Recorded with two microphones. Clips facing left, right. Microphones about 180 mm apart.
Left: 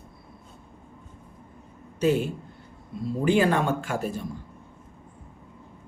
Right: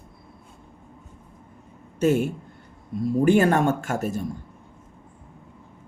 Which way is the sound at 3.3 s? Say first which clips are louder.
Right 2 dB; 45° right (ahead or behind).